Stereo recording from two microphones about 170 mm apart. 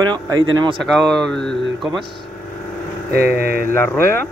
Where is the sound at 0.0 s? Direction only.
25° right (ahead or behind).